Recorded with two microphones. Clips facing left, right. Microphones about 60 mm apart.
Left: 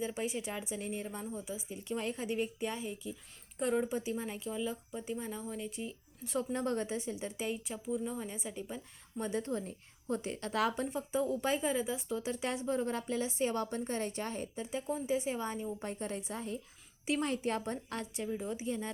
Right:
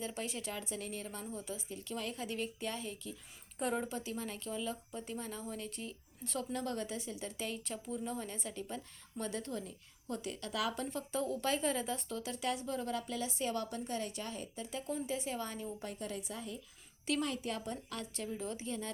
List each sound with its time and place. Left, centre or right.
0.0 s a woman's voice: centre
3.6 s speech: centre
3.8 s speech: centre
6.5 s a woman's voice: left
10.9 s a woman's voice: centre
15.9 s a woman's voice: left
18.2 s a woman's voice: centre